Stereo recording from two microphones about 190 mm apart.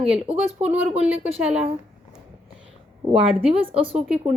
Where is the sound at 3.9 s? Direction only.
5° right (ahead or behind).